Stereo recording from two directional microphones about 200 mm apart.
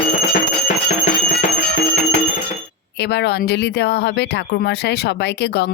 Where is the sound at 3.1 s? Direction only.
55° left (ahead or behind).